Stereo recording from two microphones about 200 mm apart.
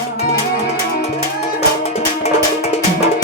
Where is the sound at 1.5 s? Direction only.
30° left (ahead or behind).